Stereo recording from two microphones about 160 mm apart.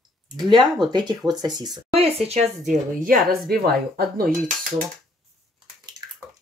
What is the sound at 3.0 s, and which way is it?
A woman's voice, 65° right (ahead or behind).